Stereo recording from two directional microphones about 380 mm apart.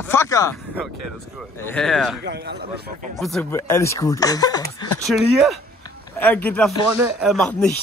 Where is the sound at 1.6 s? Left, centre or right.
Centre.